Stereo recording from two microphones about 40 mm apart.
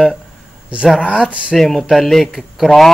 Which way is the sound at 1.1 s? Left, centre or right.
Right.